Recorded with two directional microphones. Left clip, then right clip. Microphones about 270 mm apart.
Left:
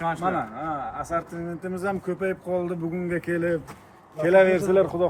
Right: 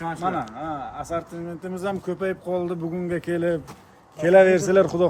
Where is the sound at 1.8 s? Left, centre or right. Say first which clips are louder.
Right 1 dB; right.